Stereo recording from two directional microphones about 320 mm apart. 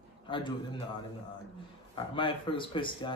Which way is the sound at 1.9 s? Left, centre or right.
Centre.